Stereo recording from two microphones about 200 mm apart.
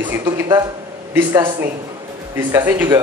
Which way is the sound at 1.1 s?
10° right (ahead or behind).